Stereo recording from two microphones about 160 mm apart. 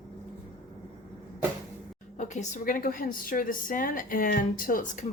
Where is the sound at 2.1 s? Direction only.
50° left (ahead or behind).